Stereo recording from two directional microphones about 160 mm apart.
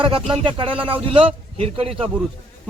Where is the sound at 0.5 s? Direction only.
35° right (ahead or behind).